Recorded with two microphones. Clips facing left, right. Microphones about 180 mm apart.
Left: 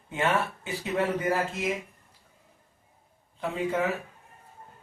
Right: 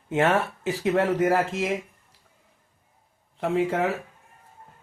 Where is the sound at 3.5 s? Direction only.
80° right.